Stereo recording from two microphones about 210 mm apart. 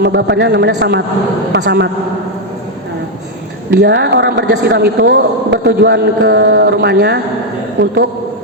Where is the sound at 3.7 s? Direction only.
50° right (ahead or behind).